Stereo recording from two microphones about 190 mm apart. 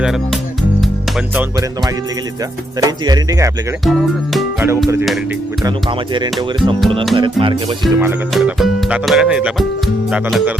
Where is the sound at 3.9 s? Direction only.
Centre (ahead or behind).